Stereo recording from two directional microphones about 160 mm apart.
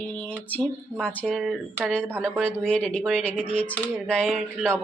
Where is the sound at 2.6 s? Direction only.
5° left (ahead or behind).